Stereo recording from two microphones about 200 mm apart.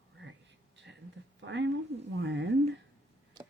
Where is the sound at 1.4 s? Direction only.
65° right (ahead or behind).